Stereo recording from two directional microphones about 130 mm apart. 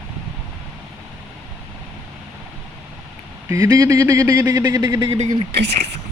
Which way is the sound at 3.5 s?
25° right (ahead or behind).